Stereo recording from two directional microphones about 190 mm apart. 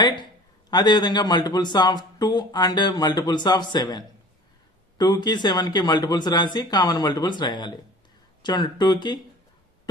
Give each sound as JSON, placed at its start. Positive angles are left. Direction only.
{"t": 0.0, "sound": "a man's voice", "side_deg": 25}